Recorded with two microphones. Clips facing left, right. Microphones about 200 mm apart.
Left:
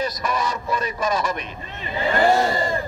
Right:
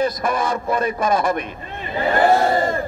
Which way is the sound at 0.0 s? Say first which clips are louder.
Right 4 dB; 55° right (ahead or behind).